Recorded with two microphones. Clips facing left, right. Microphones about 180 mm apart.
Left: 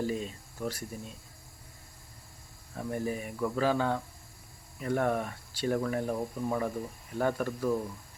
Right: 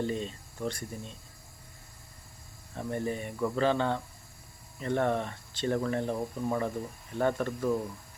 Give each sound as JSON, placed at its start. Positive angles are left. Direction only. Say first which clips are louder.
{"t": 0.0, "sound": "speech", "louder": "even", "side_deg": 5}
{"t": 2.7, "sound": "speech", "louder": "right 1 dB", "side_deg": 5}